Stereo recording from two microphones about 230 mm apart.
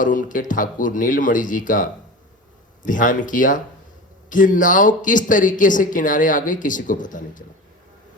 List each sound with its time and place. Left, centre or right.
0.0 s speech: left